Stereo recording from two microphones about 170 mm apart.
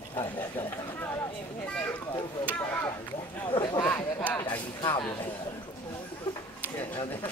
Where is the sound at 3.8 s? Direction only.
10° left (ahead or behind).